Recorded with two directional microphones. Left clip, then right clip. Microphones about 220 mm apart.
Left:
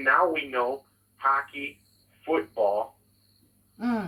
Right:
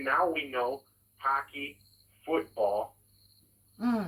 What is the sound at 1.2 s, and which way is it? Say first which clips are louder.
Speech: left 5 dB; 30° left (ahead or behind).